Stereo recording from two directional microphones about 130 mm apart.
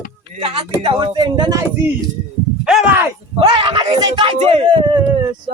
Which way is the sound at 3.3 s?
40° right (ahead or behind).